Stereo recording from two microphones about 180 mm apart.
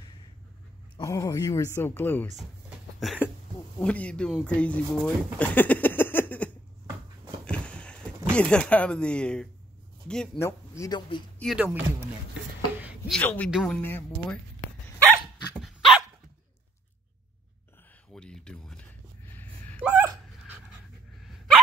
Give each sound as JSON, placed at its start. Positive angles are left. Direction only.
{"t": 0.9, "sound": "speech", "side_deg": 20}
{"t": 3.0, "sound": "speech", "side_deg": 0}
{"t": 7.4, "sound": "a sound", "side_deg": 5}
{"t": 8.4, "sound": "speech", "side_deg": 5}
{"t": 10.7, "sound": "speech", "side_deg": 20}
{"t": 11.3, "sound": "speech", "side_deg": 0}
{"t": 13.1, "sound": "speech", "side_deg": 5}
{"t": 13.7, "sound": "speech", "side_deg": 10}
{"t": 15.1, "sound": "dog", "side_deg": -5}
{"t": 18.1, "sound": "a sound", "side_deg": 5}
{"t": 19.8, "sound": "dog", "side_deg": -5}